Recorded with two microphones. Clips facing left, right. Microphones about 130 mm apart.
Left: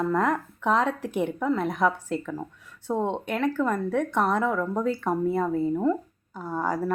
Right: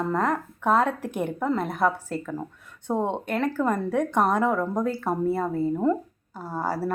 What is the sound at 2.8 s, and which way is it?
Speech, 15° right (ahead or behind).